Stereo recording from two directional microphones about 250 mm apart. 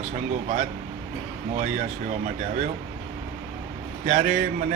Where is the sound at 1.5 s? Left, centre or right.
Right.